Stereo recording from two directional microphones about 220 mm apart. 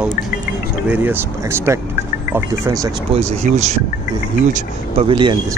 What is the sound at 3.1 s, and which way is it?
Speech, 30° right (ahead or behind).